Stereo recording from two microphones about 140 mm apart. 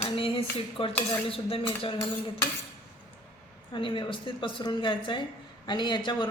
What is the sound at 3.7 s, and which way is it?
A woman's voice, 35° left (ahead or behind).